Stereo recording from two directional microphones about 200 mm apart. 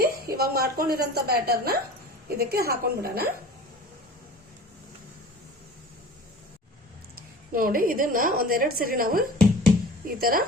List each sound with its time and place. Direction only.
0.0 s a woman's voice: 50° right (ahead or behind)
7.5 s a woman's voice: 45° right (ahead or behind)